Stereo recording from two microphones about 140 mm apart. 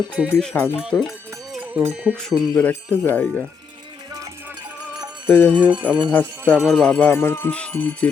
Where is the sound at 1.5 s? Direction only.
10° right (ahead or behind).